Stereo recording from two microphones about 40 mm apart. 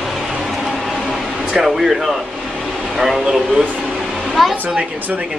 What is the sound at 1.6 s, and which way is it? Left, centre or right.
A man's voice, centre.